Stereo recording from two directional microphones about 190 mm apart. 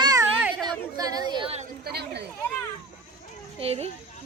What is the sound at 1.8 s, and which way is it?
Chatter, 60° right (ahead or behind).